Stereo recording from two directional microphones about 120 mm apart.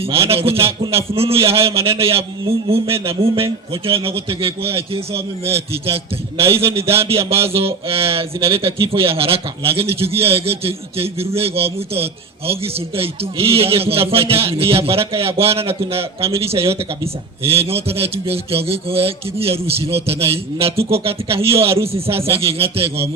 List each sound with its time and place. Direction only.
0.0 s a man's voice: 50° right (ahead or behind)
7.3 s a man's voice: 55° right (ahead or behind)